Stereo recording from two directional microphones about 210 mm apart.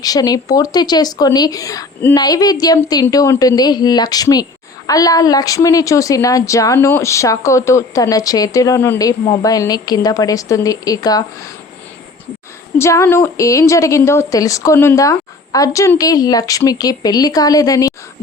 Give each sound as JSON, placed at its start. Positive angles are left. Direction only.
{"t": 0.0, "sound": "a woman's voice", "side_deg": 15}
{"t": 12.8, "sound": "a woman's voice", "side_deg": 15}